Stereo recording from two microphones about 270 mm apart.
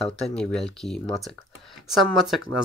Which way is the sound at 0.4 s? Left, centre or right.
Centre.